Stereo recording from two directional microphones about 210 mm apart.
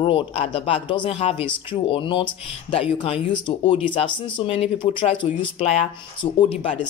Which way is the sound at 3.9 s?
25° left (ahead or behind).